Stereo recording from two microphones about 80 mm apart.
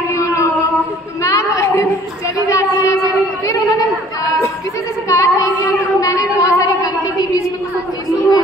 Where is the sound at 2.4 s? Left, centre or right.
Left.